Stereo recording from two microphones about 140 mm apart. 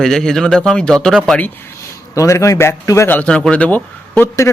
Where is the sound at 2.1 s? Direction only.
20° left (ahead or behind).